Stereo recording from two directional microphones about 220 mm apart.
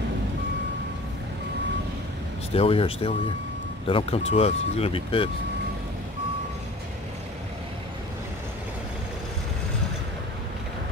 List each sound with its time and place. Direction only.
2.5 s speech: 25° left (ahead or behind)